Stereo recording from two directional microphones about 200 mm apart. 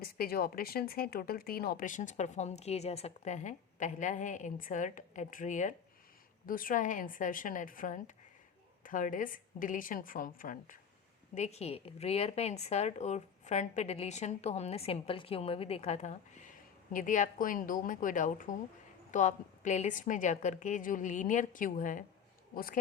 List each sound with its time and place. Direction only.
0.0 s a woman's voice: 50° left (ahead or behind)